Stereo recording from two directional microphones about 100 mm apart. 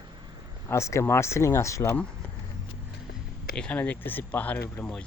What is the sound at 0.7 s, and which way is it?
Speech, 30° left (ahead or behind).